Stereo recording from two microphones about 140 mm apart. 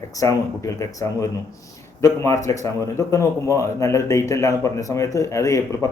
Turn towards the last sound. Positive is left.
turn(degrees=20)  # may be behind; listen again after turning